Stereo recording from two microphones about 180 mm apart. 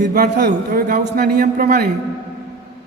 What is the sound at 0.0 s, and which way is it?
A man's voice, 60° right (ahead or behind).